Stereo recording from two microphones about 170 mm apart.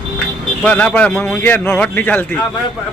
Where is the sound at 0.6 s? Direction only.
10° left (ahead or behind).